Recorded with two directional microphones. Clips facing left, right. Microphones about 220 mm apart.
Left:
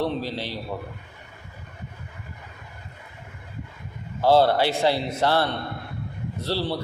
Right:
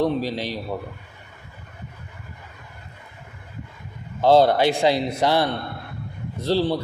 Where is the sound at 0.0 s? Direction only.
15° right (ahead or behind).